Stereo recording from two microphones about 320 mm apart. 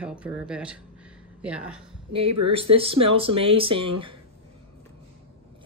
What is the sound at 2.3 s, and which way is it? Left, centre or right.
Speech, right.